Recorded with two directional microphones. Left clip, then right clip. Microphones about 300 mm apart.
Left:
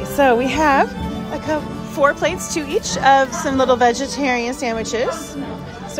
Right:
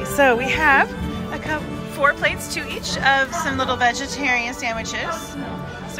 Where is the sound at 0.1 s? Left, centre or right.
Centre.